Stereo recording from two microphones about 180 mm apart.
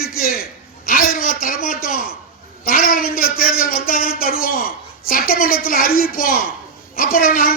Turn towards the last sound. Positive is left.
turn(degrees=50)  # may be behind; listen again after turning